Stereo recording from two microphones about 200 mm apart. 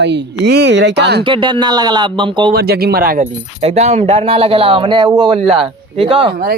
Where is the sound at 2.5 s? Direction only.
50° right (ahead or behind).